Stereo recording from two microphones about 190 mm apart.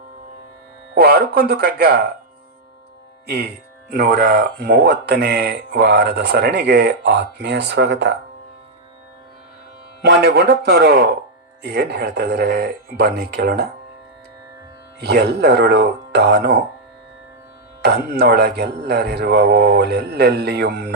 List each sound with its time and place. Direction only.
0.9 s speech: 55° right (ahead or behind)
3.2 s speech: 55° right (ahead or behind)
10.0 s speech: 60° right (ahead or behind)
15.0 s speech: 60° right (ahead or behind)
17.8 s speech: 60° right (ahead or behind)